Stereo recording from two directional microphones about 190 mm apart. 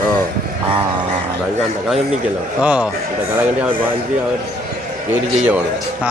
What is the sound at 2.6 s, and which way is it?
Speech, 5° right (ahead or behind).